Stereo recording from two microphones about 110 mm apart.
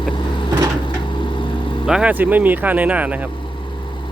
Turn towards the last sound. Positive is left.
turn(degrees=-15)  # may be behind; listen again after turning